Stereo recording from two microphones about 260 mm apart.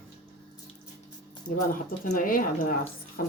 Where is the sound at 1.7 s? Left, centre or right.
Left.